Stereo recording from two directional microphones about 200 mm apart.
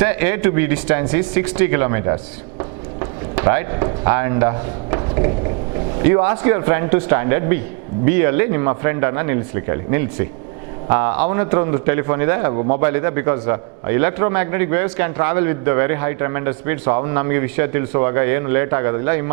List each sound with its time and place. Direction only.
0.0 s a man's voice: 10° right (ahead or behind)
12.5 s a man's voice: 35° right (ahead or behind)
12.8 s a man's voice: 15° right (ahead or behind)